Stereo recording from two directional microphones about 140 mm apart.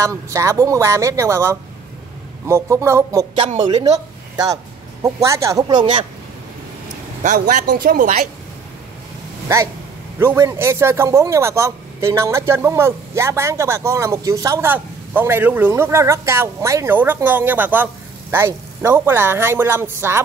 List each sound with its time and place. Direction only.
0.0 s a man's voice: 20° right (ahead or behind)
3.4 s a man's voice: 40° right (ahead or behind)
5.0 s a man's voice: 20° right (ahead or behind)
7.2 s a woman's voice: 70° right (ahead or behind)
10.1 s a man's voice: 20° right (ahead or behind)